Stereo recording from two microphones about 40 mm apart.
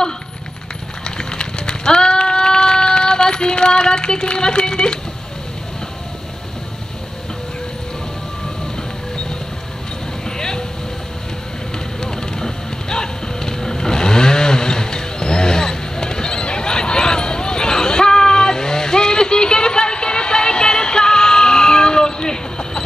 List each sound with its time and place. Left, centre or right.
1.0 s a sound: left
10.2 s vehicle: centre
12.0 s music: centre